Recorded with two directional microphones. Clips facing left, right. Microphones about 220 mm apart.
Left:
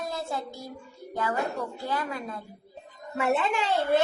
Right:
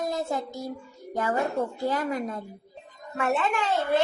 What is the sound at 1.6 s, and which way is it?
Speech, 20° right (ahead or behind).